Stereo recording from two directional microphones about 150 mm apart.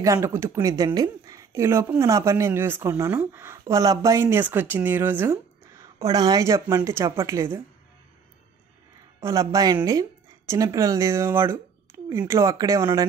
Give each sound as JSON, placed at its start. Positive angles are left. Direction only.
{"t": 0.0, "sound": "speech", "side_deg": -20}
{"t": 9.2, "sound": "speech", "side_deg": -20}